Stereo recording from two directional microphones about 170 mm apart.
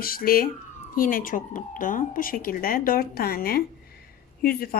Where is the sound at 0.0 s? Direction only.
60° left (ahead or behind).